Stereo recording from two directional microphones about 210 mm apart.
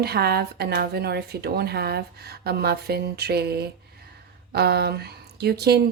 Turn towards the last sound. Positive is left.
turn(degrees=-50)  # may be behind; listen again after turning